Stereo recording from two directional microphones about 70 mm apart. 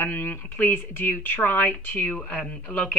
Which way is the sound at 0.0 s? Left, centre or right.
Left.